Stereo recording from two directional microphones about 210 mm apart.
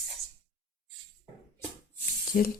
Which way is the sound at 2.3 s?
40° left (ahead or behind).